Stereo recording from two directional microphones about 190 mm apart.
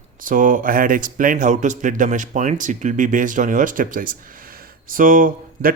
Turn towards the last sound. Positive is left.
turn(degrees=-50)  # may be behind; listen again after turning